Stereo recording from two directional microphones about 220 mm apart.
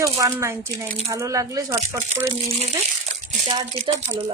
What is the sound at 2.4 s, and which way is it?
Speech, 30° right (ahead or behind).